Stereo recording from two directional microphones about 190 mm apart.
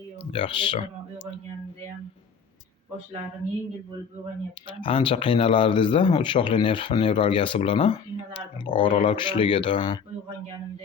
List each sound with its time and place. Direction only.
0.3 s speech: 25° left (ahead or behind)
4.8 s speech: 25° left (ahead or behind)